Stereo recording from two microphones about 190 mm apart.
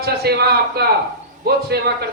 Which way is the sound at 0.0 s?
55° right (ahead or behind).